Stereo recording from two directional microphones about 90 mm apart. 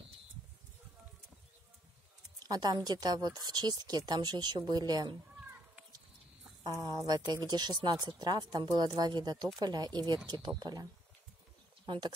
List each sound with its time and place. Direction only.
2.4 s speech: 45° right (ahead or behind)
6.6 s speech: 40° right (ahead or behind)
11.8 s speech: 60° right (ahead or behind)